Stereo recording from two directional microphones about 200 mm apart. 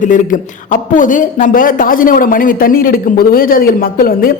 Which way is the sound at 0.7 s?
40° left (ahead or behind).